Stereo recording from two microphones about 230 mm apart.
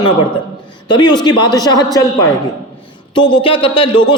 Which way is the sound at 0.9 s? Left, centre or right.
Centre.